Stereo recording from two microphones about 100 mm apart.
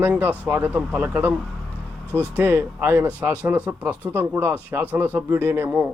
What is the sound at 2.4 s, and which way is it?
Speech, 20° right (ahead or behind).